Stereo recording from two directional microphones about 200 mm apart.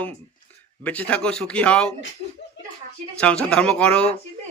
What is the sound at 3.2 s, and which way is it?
Speech, 5° left (ahead or behind).